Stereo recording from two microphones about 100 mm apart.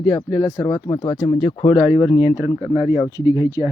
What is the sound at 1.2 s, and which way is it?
Speech, 75° left (ahead or behind).